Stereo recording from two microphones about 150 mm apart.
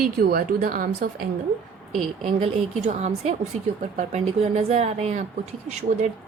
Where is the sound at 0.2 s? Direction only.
80° right.